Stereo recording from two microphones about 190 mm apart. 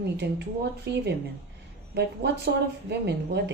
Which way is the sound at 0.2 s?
60° right (ahead or behind).